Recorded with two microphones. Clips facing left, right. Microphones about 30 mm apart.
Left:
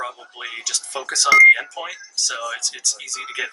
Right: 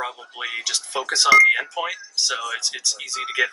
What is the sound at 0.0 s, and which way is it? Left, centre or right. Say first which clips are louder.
Speech: right 1 dB; centre.